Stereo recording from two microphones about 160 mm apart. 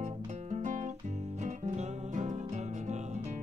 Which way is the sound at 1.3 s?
45° right (ahead or behind).